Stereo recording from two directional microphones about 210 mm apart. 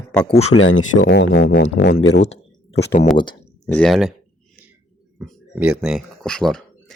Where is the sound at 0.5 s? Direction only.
65° left (ahead or behind).